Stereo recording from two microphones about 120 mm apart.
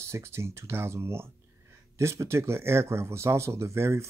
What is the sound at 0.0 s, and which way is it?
Speech, 20° right (ahead or behind).